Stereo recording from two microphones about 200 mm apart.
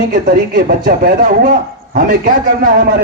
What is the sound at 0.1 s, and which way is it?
Speech, 45° right (ahead or behind).